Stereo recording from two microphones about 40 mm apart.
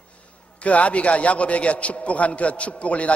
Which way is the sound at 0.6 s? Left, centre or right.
Left.